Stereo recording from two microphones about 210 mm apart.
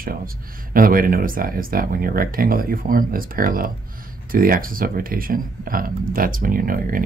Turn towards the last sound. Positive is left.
turn(degrees=-40)  # may be behind; listen again after turning